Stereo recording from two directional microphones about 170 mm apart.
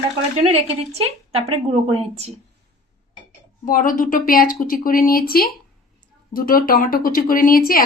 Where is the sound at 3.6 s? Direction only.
50° left (ahead or behind).